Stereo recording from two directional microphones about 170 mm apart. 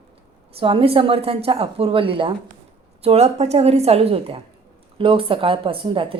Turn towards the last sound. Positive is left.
turn(degrees=-30)  # may be behind; listen again after turning